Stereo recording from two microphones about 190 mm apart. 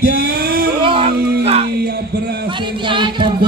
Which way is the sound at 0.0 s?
50° right (ahead or behind).